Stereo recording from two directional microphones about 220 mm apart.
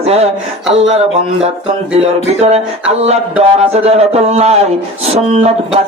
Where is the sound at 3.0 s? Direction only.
30° right (ahead or behind).